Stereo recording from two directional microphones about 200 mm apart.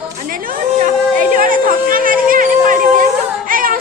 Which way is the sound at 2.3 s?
45° right (ahead or behind).